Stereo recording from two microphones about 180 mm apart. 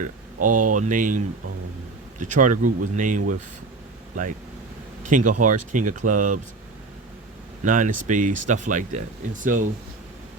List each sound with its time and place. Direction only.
0.0 s speech: 45° right (ahead or behind)
5.0 s speech: 45° right (ahead or behind)
7.6 s speech: 45° right (ahead or behind)